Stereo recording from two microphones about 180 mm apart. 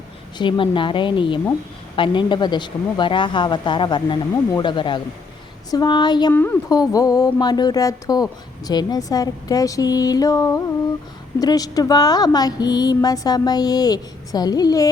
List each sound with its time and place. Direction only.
0.3 s speech: 25° left (ahead or behind)
6.3 s speech: 10° left (ahead or behind)